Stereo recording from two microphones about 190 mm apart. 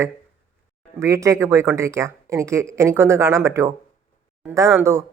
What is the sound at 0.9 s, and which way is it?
Speech, 15° right (ahead or behind).